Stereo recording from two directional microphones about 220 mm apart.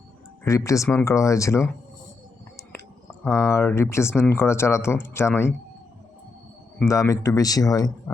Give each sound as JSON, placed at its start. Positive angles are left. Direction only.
{"t": 0.4, "sound": "speech", "side_deg": 15}
{"t": 3.2, "sound": "speech", "side_deg": 10}
{"t": 6.7, "sound": "speech", "side_deg": 15}